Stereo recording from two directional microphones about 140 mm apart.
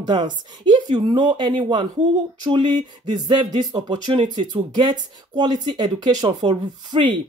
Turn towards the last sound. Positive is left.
turn(degrees=-35)  # may be behind; listen again after turning